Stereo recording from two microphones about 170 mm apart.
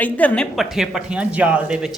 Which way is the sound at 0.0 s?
10° left (ahead or behind).